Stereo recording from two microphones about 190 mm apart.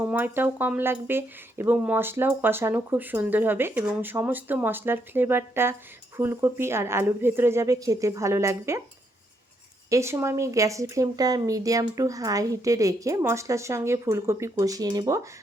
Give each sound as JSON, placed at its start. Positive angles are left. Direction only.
{"t": 0.0, "sound": "speech", "side_deg": -10}
{"t": 9.9, "sound": "speech", "side_deg": -15}